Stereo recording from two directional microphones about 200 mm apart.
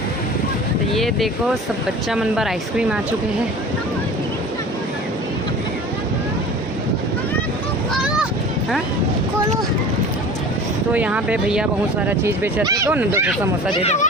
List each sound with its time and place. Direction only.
0.9 s speech: centre (ahead or behind)
8.0 s a sound: 5° right (ahead or behind)
10.9 s speech: 5° right (ahead or behind)
13.8 s speech: 35° left (ahead or behind)